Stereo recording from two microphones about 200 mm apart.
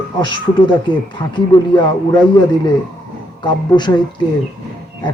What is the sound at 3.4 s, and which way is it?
Speech, 20° left (ahead or behind).